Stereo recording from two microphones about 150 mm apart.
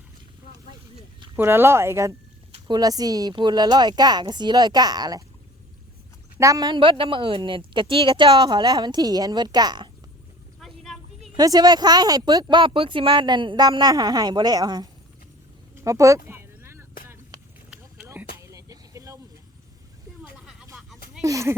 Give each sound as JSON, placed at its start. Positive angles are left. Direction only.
{"t": 1.4, "sound": "speech", "side_deg": -15}
{"t": 6.4, "sound": "a woman's voice", "side_deg": -25}
{"t": 11.3, "sound": "speech", "side_deg": -25}
{"t": 15.7, "sound": "a sound", "side_deg": -20}
{"t": 18.3, "sound": "vehicle", "side_deg": -20}
{"t": 21.2, "sound": "speech", "side_deg": -20}